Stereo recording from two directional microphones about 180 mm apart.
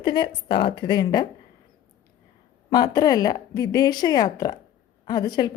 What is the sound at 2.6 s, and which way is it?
A woman's voice, 20° left (ahead or behind).